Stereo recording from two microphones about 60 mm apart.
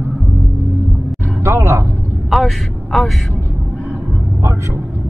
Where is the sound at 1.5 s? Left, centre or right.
Right.